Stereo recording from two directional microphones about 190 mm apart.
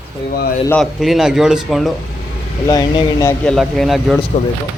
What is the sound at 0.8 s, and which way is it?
A man's voice, centre (ahead or behind).